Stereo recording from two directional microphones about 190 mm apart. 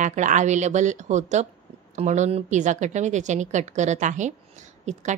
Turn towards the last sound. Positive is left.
turn(degrees=-40)  # may be behind; listen again after turning